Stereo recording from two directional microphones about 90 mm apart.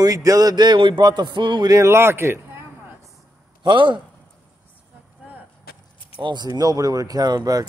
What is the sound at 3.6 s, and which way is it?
Speech, 65° right (ahead or behind).